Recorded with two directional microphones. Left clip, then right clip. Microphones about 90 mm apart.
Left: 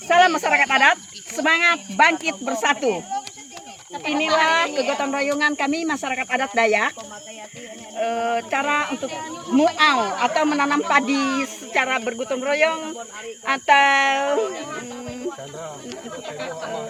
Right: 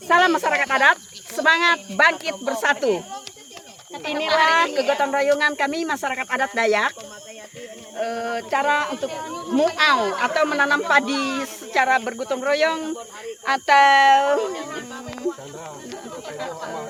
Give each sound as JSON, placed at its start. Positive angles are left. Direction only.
{"t": 0.1, "sound": "speech", "side_deg": -45}
{"t": 0.4, "sound": "speech", "side_deg": -20}
{"t": 0.7, "sound": "speech", "side_deg": -35}
{"t": 4.0, "sound": "speech", "side_deg": -40}
{"t": 6.5, "sound": "speech", "side_deg": -20}
{"t": 8.0, "sound": "speech", "side_deg": -20}
{"t": 10.8, "sound": "speech", "side_deg": -20}
{"t": 16.2, "sound": "a sound", "side_deg": -15}